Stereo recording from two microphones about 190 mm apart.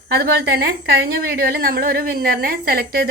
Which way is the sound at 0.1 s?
55° right (ahead or behind).